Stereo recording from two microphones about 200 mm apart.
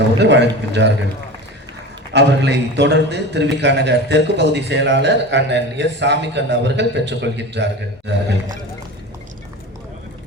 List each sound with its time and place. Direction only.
0.2 s a man's voice: 60° right (ahead or behind)
2.1 s a man's voice: 60° right (ahead or behind)